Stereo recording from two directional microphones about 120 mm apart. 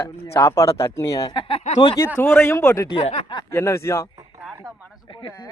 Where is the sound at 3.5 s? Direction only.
20° left (ahead or behind).